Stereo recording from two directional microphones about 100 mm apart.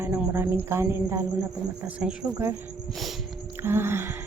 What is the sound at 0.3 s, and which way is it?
Speech, 25° right (ahead or behind).